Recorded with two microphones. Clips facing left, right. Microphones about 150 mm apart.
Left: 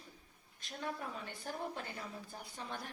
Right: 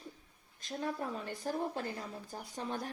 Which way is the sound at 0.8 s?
35° right (ahead or behind).